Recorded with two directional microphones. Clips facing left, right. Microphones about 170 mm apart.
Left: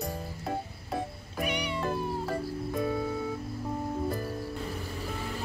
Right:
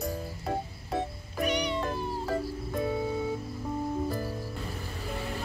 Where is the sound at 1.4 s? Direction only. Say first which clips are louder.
Right 2 dB; 10° left (ahead or behind).